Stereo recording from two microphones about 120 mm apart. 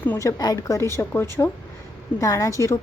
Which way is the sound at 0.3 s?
30° left (ahead or behind).